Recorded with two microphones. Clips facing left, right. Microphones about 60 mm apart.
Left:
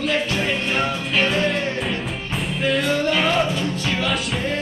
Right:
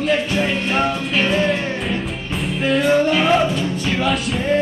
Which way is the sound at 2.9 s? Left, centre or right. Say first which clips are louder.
Right 5 dB; centre.